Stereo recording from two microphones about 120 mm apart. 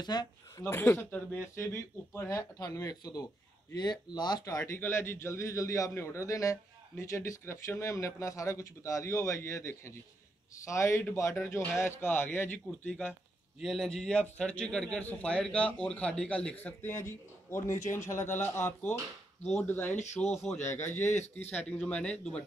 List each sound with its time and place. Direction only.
0.0 s speech: 35° left (ahead or behind)
0.7 s a man's voice: 20° left (ahead or behind)
4.7 s a man's voice: 20° left (ahead or behind)
12.5 s a man's voice: 10° left (ahead or behind)